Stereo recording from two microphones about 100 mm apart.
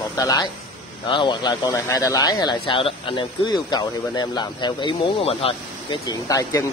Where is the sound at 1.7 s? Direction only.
30° left (ahead or behind).